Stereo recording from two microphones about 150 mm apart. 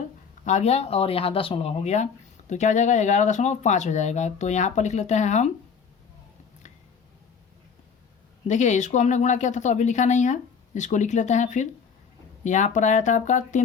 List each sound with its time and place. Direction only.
0.4 s speech: 50° left (ahead or behind)
8.4 s speech: 50° left (ahead or behind)